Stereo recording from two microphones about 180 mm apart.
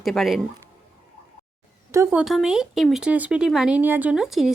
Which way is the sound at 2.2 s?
Centre (ahead or behind).